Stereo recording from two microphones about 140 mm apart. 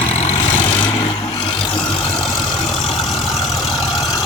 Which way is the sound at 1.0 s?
25° left (ahead or behind).